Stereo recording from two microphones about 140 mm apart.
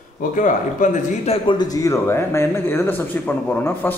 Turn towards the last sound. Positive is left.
turn(degrees=15)  # may be behind; listen again after turning